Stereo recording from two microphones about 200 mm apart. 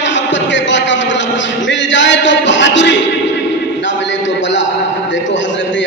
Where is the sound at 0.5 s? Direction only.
65° left (ahead or behind).